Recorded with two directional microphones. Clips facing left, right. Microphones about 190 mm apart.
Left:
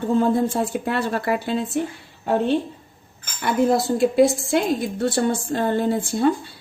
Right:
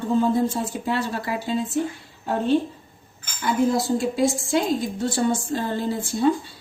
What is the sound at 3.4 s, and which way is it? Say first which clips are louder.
A woman's voice: left 2 dB; 65° left (ahead or behind).